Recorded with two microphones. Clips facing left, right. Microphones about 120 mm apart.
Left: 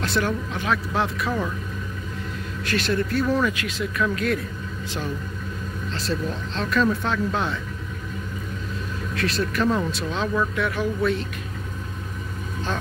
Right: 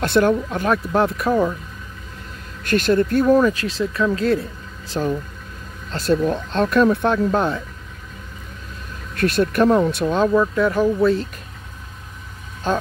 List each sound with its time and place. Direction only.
0.0 s speech: 50° right (ahead or behind)
2.6 s speech: 45° right (ahead or behind)
3.4 s speech: 35° right (ahead or behind)
5.9 s speech: 50° right (ahead or behind)
7.2 s speech: 40° right (ahead or behind)
9.1 s speech: 50° right (ahead or behind)
10.5 s speech: 35° right (ahead or behind)